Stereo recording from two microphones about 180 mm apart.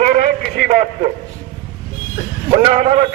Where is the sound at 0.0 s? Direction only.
50° right (ahead or behind).